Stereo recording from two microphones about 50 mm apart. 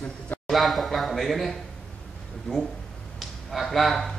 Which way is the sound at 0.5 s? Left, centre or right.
Centre.